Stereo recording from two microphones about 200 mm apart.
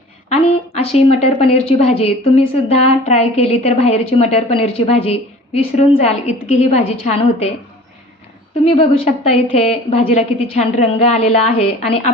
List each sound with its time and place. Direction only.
1.2 s a woman's voice: 30° left (ahead or behind)
8.6 s a woman's voice: 30° left (ahead or behind)